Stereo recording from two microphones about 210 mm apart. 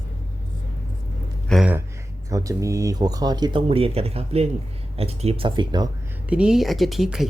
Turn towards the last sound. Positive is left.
turn(degrees=0)  # may be behind; listen again after turning